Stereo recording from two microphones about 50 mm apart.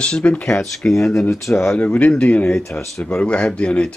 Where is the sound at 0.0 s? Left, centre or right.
Left.